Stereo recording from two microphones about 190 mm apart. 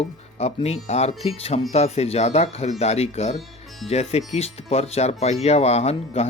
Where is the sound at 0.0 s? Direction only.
35° left (ahead or behind).